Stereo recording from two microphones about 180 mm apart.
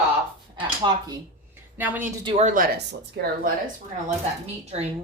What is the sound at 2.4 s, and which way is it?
Speech, 45° right (ahead or behind).